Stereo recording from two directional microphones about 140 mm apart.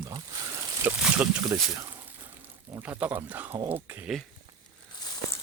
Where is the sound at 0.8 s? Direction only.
10° right (ahead or behind).